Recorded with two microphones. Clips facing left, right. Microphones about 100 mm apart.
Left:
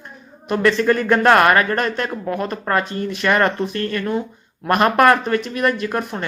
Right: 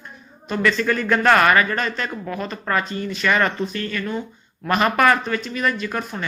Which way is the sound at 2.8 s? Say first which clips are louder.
Left 3 dB; 55° left (ahead or behind).